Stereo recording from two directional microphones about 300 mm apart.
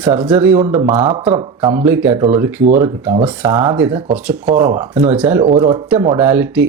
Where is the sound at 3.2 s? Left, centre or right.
Centre.